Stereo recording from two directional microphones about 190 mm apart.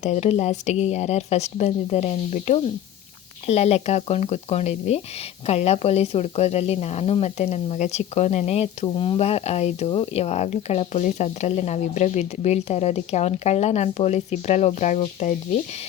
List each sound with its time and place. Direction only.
0.0 s speech: 35° left (ahead or behind)